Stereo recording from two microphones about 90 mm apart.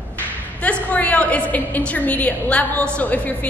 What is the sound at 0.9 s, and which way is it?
A woman's voice, 15° left (ahead or behind).